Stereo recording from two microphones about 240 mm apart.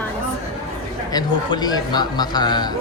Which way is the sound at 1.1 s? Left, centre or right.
Centre.